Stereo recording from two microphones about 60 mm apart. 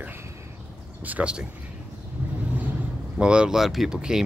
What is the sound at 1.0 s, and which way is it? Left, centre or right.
Speech, right.